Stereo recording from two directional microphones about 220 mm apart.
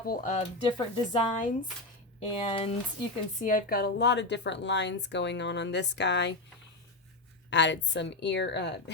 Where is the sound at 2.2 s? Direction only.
25° left (ahead or behind).